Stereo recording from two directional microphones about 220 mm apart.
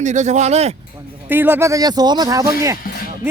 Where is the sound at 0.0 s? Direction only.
35° right (ahead or behind).